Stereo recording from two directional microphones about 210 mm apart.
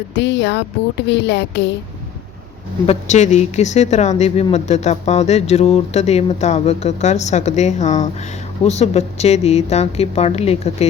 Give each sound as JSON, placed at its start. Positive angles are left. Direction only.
{"t": 0.2, "sound": "speech", "side_deg": 55}
{"t": 2.8, "sound": "speech", "side_deg": 30}